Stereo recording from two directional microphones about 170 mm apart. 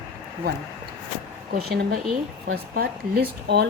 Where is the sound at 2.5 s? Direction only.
65° right (ahead or behind).